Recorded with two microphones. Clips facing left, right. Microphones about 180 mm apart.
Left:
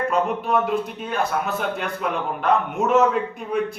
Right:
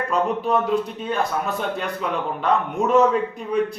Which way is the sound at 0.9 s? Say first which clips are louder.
Even; centre (ahead or behind).